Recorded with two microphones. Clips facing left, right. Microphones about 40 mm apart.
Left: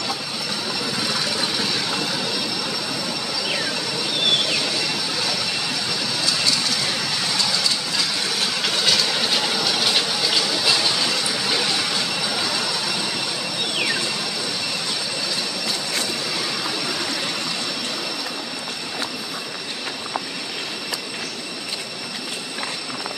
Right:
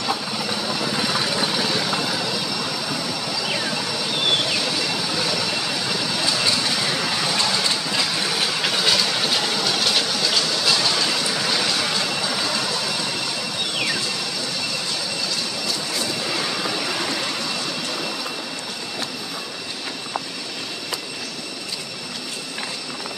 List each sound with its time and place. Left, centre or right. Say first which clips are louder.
0.7 s vehicle: right 1 dB; centre
4.3 s vehicle: even; centre
7.3 s vehicle: right 1 dB; right
8.3 s vehicle: right 1 dB; centre
11.1 s vehicle: even; centre